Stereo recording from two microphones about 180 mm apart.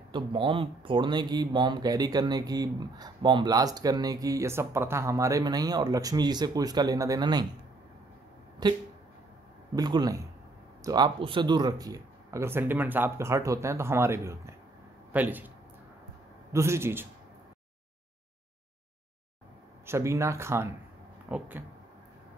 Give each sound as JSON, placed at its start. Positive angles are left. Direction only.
{"t": 0.1, "sound": "speech", "side_deg": -30}
{"t": 8.6, "sound": "speech", "side_deg": -25}
{"t": 16.5, "sound": "speech", "side_deg": -15}
{"t": 19.9, "sound": "speech", "side_deg": -15}